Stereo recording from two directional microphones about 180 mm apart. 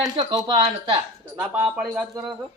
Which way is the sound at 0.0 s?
20° right (ahead or behind).